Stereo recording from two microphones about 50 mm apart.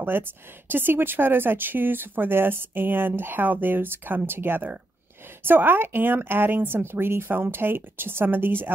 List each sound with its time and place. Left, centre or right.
0.0 s speech: right